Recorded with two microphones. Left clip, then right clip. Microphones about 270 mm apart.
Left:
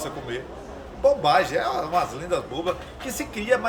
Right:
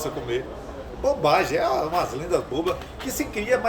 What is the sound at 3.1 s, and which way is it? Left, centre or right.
Speech, centre.